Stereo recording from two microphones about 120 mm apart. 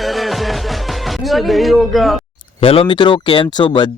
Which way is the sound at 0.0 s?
Centre (ahead or behind).